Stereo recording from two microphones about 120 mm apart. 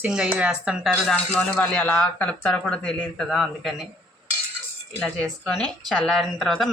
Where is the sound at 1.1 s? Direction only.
10° left (ahead or behind).